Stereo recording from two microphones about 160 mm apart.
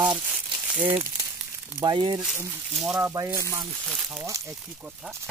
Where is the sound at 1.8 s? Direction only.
30° right (ahead or behind).